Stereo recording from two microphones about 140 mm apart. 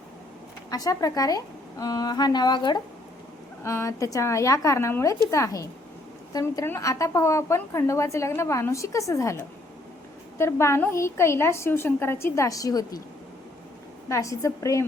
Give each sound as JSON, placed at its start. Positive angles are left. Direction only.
{"t": 0.7, "sound": "a woman's voice", "side_deg": 25}
{"t": 3.6, "sound": "a woman's voice", "side_deg": 20}
{"t": 14.1, "sound": "a woman's voice", "side_deg": 20}